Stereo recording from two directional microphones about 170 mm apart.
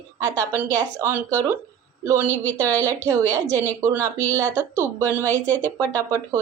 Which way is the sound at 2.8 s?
15° right (ahead or behind).